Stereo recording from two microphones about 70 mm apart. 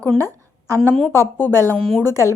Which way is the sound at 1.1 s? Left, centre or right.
Left.